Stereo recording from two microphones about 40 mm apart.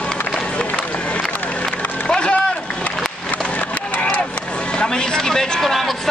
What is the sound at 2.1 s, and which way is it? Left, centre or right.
Speech, left.